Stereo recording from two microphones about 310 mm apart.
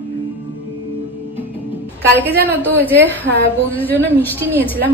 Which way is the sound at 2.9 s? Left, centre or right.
Centre.